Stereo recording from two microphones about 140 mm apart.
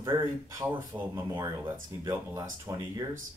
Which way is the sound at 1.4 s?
30° right (ahead or behind).